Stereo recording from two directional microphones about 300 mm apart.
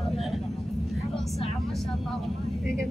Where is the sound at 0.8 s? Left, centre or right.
Centre.